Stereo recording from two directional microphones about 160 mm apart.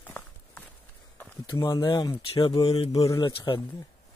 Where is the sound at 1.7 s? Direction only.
25° left (ahead or behind).